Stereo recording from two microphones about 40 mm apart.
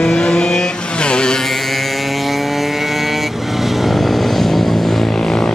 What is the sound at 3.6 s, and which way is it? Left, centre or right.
Vehicle, centre.